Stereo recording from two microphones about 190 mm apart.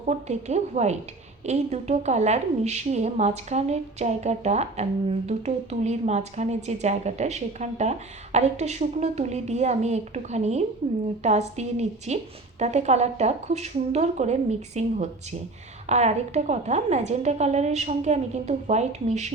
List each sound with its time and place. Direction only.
0.0 s a woman's voice: 35° right (ahead or behind)